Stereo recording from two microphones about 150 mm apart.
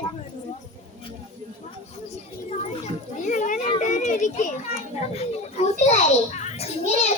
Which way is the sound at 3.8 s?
55° left (ahead or behind).